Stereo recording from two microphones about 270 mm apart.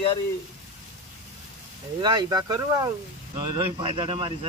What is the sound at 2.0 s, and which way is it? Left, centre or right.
Speech, centre.